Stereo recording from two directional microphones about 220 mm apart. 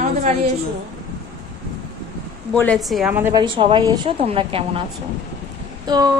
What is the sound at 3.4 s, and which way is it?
A woman's voice, 25° right (ahead or behind).